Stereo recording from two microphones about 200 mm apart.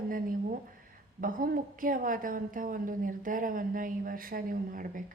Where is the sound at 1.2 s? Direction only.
45° right (ahead or behind).